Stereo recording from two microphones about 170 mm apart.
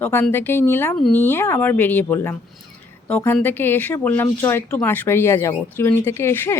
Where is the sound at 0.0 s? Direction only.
10° left (ahead or behind).